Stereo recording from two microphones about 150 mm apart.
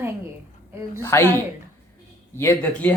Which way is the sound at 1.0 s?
20° left (ahead or behind).